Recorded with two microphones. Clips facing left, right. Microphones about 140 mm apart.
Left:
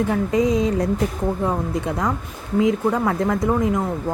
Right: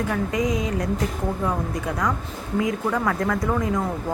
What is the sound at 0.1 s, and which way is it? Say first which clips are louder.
Speech: left 5 dB; 30° left (ahead or behind).